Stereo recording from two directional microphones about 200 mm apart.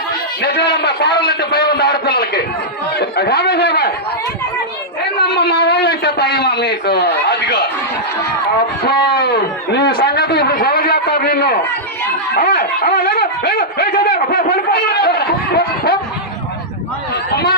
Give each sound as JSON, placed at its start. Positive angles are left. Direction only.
{"t": 0.4, "sound": "a man's voice", "side_deg": 55}
{"t": 1.2, "sound": "a sound", "side_deg": 50}
{"t": 2.9, "sound": "speech", "side_deg": 50}
{"t": 5.2, "sound": "a sound", "side_deg": 55}
{"t": 8.8, "sound": "a man's voice", "side_deg": 50}
{"t": 15.5, "sound": "snicker", "side_deg": 50}